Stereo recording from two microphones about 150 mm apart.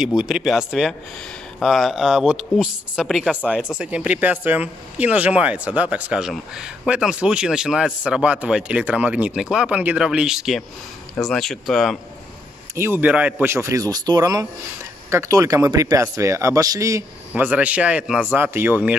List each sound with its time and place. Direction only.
0.0 s speech: 5° right (ahead or behind)
12.7 s speech: 15° right (ahead or behind)
17.3 s speech: 10° right (ahead or behind)